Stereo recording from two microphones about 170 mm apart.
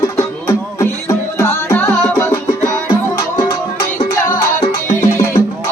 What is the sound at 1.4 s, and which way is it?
Music, 15° left (ahead or behind).